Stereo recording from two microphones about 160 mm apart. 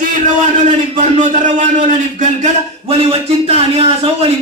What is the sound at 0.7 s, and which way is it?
A man's voice, 50° right (ahead or behind).